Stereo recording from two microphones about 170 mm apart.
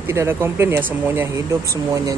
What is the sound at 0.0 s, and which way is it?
Speech, 15° right (ahead or behind).